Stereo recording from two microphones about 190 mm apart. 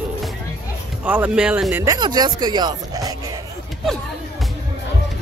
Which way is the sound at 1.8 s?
20° right (ahead or behind).